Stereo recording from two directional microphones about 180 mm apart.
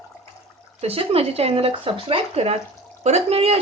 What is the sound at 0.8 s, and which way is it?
Speech, 35° right (ahead or behind).